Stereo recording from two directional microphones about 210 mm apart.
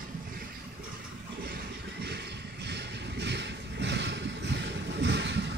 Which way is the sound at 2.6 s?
55° right (ahead or behind).